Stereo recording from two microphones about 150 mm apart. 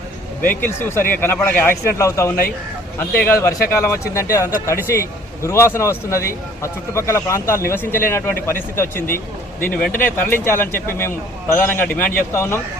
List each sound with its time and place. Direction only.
0.4 s a man's voice: 15° left (ahead or behind)